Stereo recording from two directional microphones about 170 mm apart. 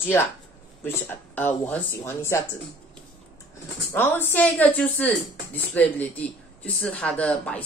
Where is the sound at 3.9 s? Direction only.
10° left (ahead or behind).